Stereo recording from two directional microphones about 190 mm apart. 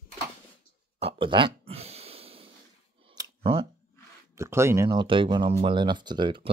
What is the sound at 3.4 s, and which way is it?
Speech, 30° right (ahead or behind).